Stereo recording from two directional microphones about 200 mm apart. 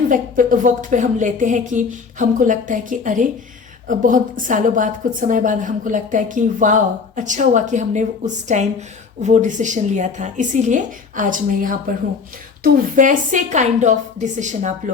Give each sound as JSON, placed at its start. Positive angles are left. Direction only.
{"t": 0.1, "sound": "speech", "side_deg": -40}